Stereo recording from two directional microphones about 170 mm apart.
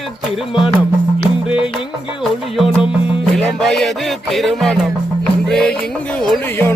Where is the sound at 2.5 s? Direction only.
Centre (ahead or behind).